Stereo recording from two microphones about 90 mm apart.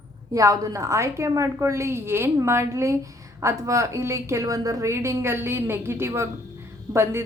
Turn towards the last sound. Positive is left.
turn(degrees=-30)  # may be behind; listen again after turning